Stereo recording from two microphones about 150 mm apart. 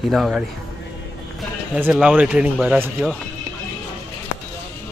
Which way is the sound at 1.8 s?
10° right (ahead or behind).